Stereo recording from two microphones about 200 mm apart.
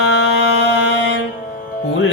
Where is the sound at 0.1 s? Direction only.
60° left (ahead or behind).